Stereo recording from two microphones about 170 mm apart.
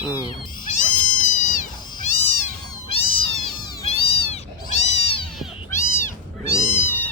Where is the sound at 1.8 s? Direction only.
25° left (ahead or behind).